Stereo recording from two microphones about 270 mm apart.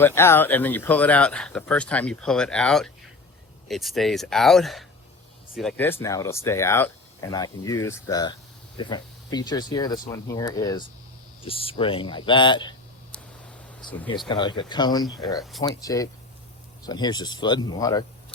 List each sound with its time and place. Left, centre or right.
0.0 s speech: centre
13.8 s speech: centre
14.3 s speech: centre